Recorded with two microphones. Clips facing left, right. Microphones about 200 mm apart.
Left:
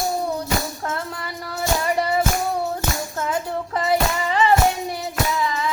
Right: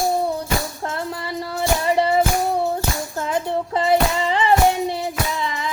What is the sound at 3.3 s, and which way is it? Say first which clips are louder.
Child singing: right 5 dB; 25° right (ahead or behind).